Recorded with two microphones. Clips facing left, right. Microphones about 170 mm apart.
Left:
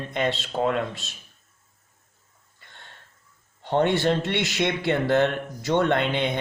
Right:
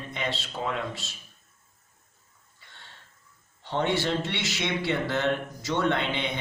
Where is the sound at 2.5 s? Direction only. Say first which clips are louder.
Left 3 dB; 55° left (ahead or behind).